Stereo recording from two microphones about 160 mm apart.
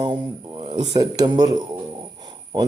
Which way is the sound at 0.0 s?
30° right (ahead or behind).